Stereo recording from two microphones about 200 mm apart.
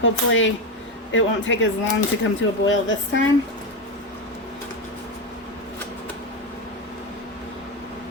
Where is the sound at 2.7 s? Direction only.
70° left (ahead or behind).